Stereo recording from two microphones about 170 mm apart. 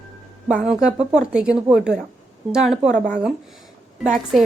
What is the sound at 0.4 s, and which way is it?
Speech, 5° right (ahead or behind).